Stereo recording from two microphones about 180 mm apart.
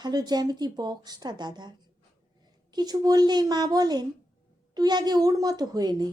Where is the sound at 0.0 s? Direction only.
25° right (ahead or behind).